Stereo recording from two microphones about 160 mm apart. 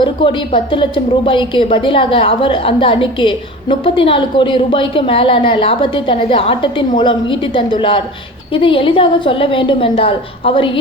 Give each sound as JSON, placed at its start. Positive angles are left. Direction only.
{"t": 0.0, "sound": "speech", "side_deg": 30}